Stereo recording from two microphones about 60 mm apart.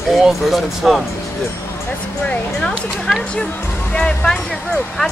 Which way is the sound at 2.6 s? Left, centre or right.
Centre.